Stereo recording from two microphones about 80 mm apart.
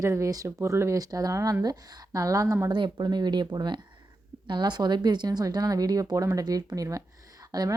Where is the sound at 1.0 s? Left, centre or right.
Right.